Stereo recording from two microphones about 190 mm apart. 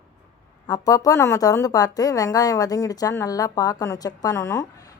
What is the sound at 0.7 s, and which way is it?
Speech, 20° left (ahead or behind).